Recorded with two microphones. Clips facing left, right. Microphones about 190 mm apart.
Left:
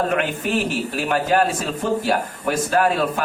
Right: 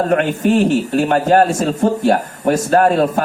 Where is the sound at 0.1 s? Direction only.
45° right (ahead or behind).